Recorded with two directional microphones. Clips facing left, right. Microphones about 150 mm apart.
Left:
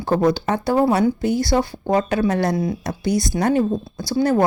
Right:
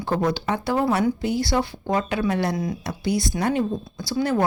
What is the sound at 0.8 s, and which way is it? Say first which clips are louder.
Speech: left 3 dB; 30° left (ahead or behind).